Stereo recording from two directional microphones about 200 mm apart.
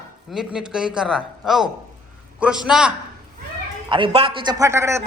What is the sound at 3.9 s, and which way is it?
Speech, 25° right (ahead or behind).